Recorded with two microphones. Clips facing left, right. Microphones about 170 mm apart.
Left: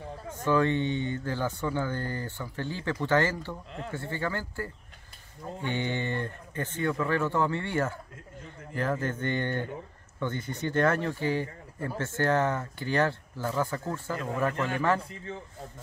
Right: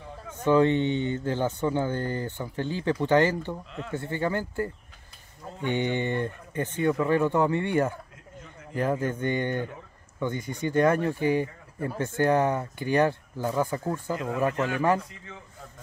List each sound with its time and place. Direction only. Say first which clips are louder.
0.5 s speech: right 4 dB; 20° right (ahead or behind)
15.0 s a man's voice: left 1 dB; 30° left (ahead or behind)